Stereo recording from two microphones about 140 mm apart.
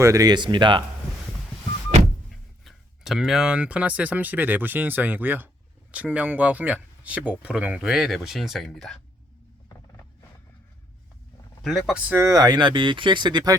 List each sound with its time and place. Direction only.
0.0 s speech: 25° right (ahead or behind)
2.6 s speech: centre (ahead or behind)
11.6 s speech: centre (ahead or behind)
12.2 s speech: 25° right (ahead or behind)